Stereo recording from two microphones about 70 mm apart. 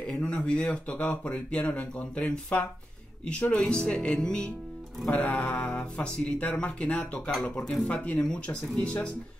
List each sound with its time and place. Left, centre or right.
0.2 s speech: centre